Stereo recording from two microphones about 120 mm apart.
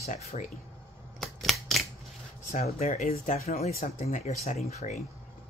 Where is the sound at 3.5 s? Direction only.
65° left (ahead or behind).